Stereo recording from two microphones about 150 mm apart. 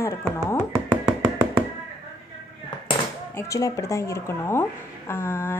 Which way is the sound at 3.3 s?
20° left (ahead or behind).